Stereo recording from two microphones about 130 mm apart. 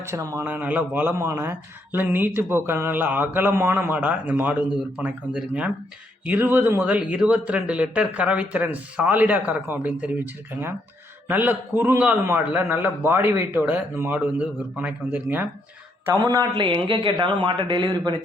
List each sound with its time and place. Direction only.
0.0 s a man's voice: 20° right (ahead or behind)
16.6 s a woman's voice: 40° right (ahead or behind)